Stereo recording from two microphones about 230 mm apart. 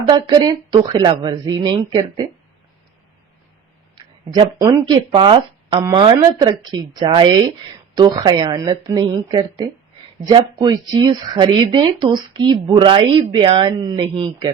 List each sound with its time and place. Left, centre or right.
0.1 s speech: centre
3.9 s speech: centre